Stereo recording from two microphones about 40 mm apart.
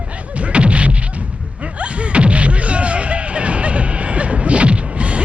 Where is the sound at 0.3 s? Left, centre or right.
Right.